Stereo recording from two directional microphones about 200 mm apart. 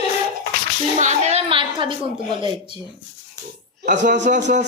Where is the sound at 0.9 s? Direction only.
35° right (ahead or behind).